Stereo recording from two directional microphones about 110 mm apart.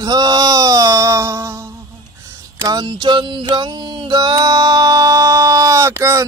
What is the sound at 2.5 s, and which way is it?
Music, 40° right (ahead or behind).